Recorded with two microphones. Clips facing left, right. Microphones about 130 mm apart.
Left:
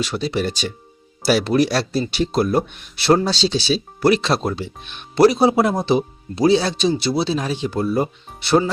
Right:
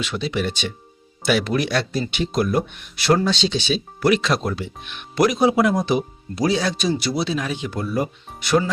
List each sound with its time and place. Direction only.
0.0 s speech: 35° left (ahead or behind)